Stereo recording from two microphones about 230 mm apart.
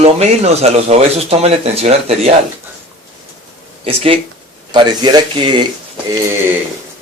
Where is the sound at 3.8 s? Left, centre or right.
Right.